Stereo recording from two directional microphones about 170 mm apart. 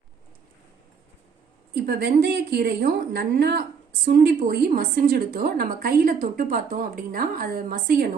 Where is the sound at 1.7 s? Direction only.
65° right (ahead or behind).